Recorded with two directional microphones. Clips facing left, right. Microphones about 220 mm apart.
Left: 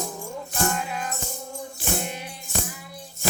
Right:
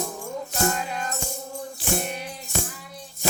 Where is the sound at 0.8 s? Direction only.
5° left (ahead or behind).